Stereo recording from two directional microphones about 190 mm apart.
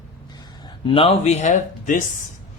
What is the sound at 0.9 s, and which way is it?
Speech, 30° left (ahead or behind).